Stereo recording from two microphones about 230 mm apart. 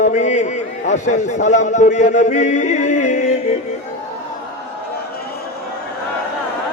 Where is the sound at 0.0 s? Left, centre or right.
Left.